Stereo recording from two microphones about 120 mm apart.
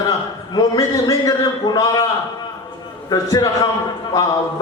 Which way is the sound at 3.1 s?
30° left (ahead or behind).